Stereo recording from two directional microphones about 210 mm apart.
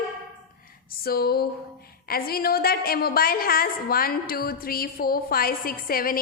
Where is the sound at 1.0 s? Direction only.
45° left (ahead or behind).